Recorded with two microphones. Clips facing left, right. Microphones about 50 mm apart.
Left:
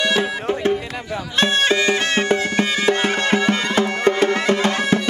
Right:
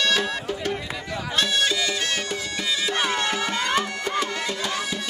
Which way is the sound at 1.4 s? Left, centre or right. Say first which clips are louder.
Left 7 dB; left.